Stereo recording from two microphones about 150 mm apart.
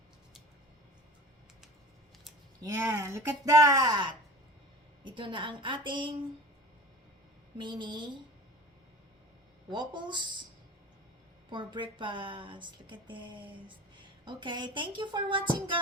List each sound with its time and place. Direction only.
2.6 s speech: 20° right (ahead or behind)
7.6 s speech: 30° right (ahead or behind)
9.6 s speech: 30° right (ahead or behind)
11.4 s speech: 35° right (ahead or behind)